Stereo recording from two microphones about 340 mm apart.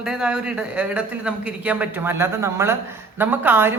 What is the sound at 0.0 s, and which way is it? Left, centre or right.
Speech, centre.